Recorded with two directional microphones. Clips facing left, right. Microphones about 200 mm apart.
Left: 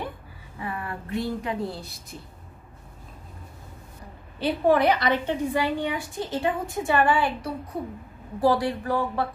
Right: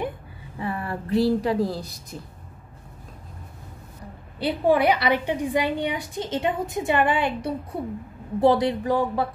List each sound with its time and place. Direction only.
0.6 s speech: 30° right (ahead or behind)
4.4 s a woman's voice: 15° right (ahead or behind)